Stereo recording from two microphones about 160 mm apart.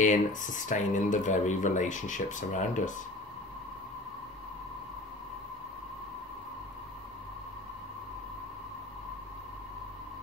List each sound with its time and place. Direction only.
0.0 s speech: 50° left (ahead or behind)